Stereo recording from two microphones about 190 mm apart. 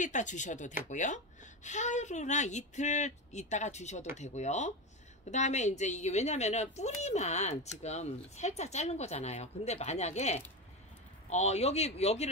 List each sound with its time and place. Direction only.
0.0 s speech: 40° left (ahead or behind)